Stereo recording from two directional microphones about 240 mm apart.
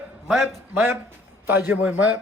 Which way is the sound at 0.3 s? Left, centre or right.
Centre.